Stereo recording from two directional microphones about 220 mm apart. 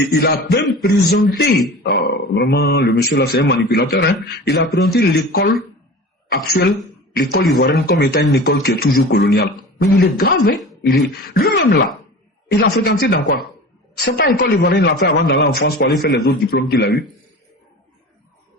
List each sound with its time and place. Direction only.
0.1 s a man's voice: 45° left (ahead or behind)
7.1 s a man's voice: 45° left (ahead or behind)